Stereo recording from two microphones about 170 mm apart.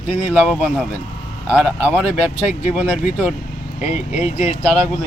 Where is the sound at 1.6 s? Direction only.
10° right (ahead or behind).